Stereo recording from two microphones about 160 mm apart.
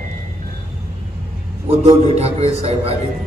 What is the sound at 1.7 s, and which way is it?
A man's voice, 40° right (ahead or behind).